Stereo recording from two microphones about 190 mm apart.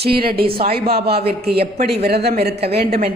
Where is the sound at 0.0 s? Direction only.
55° right (ahead or behind).